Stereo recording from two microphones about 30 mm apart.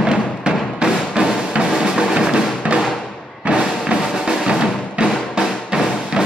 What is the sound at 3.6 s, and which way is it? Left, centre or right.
Music, right.